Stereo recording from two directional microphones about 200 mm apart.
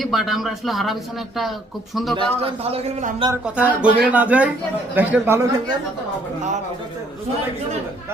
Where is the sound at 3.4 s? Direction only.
5° right (ahead or behind).